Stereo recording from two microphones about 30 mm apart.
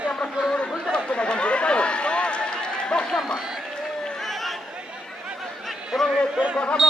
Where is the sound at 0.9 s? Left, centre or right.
Left.